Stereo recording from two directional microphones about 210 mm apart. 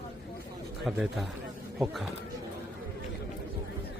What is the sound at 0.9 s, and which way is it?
Speech, centre (ahead or behind).